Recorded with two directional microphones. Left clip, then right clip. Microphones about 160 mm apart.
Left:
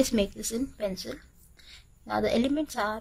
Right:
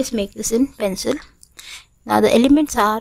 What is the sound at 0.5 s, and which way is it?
A woman's voice, 40° right (ahead or behind).